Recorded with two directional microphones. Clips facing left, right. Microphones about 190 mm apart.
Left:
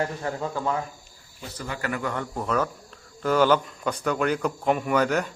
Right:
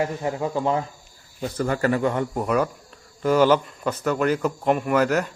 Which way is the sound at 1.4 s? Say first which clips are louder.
Right 10 dB; 50° right (ahead or behind).